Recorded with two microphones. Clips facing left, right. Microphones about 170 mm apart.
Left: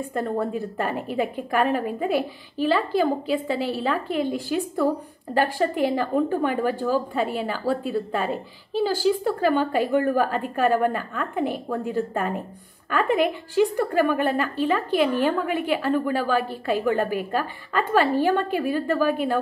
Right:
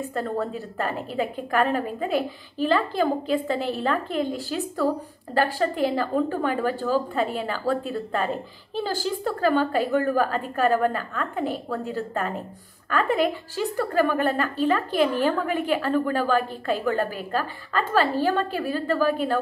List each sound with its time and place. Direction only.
0.1 s a woman's voice: 10° left (ahead or behind)
14.9 s a woman's voice: 40° right (ahead or behind)
15.7 s a woman's voice: 10° left (ahead or behind)